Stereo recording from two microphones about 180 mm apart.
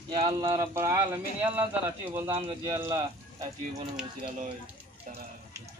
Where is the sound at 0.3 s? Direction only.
20° right (ahead or behind).